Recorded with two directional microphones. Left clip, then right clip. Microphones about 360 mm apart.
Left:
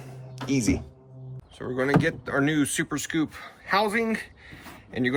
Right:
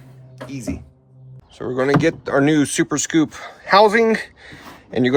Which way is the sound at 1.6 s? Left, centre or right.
Centre.